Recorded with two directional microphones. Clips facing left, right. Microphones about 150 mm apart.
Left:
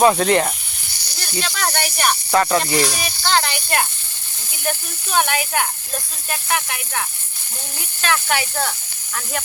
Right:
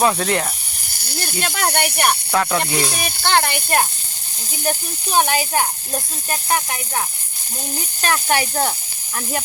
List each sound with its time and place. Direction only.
0.0 s speech: 5° left (ahead or behind)
0.9 s snake: 55° right (ahead or behind)
1.7 s speech: 60° right (ahead or behind)
2.3 s speech: centre (ahead or behind)
3.0 s speech: 55° right (ahead or behind)
5.1 s speech: 35° right (ahead or behind)
8.0 s speech: 40° right (ahead or behind)